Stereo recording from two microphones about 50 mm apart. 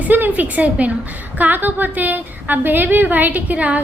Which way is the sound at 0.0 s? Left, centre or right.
Right.